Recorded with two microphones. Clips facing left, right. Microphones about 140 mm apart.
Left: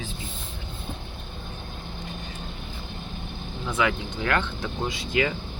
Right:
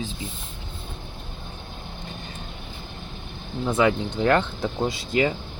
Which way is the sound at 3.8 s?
35° right (ahead or behind).